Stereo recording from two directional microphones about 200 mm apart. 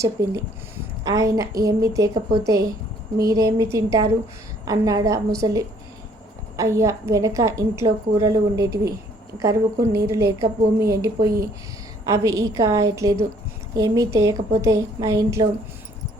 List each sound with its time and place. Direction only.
0.0 s a woman's voice: 15° right (ahead or behind)
6.6 s a woman's voice: 15° right (ahead or behind)